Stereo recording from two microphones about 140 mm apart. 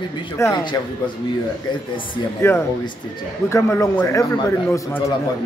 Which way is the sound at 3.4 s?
20° left (ahead or behind).